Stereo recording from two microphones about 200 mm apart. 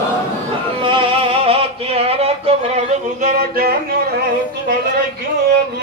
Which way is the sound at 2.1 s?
30° right (ahead or behind).